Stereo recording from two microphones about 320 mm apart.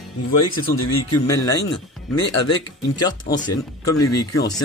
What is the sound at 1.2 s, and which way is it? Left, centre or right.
Speech, centre.